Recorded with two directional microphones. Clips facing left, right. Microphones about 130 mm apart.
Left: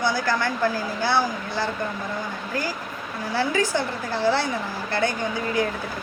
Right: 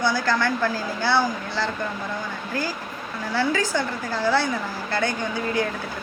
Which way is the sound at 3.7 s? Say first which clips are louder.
Even; 20° left (ahead or behind).